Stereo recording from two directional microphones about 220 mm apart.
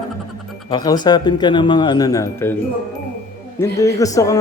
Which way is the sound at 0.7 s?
20° left (ahead or behind).